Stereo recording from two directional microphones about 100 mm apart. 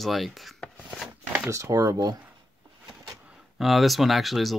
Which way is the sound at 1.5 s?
30° right (ahead or behind).